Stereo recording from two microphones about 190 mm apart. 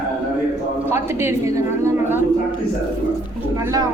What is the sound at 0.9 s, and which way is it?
A woman's voice, 15° right (ahead or behind).